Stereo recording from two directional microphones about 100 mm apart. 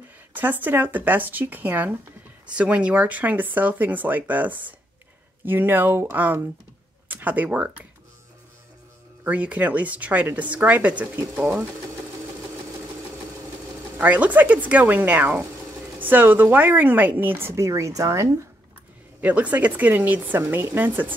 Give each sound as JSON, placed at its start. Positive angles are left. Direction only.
{"t": 0.3, "sound": "speech", "side_deg": -20}
{"t": 9.2, "sound": "speech", "side_deg": -15}
{"t": 13.9, "sound": "speech", "side_deg": -15}
{"t": 19.2, "sound": "speech", "side_deg": -15}